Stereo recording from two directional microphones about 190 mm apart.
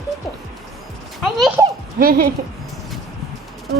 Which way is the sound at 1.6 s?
15° right (ahead or behind).